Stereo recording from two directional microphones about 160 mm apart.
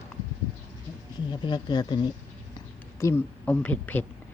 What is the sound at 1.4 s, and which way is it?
Speech, 30° left (ahead or behind).